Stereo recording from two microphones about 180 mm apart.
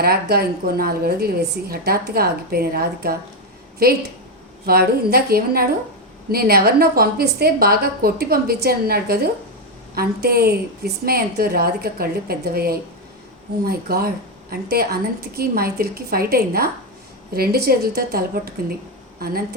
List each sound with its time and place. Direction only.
0.0 s a woman's voice: 60° right (ahead or behind)